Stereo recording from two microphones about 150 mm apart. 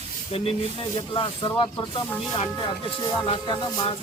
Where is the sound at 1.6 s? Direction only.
35° left (ahead or behind).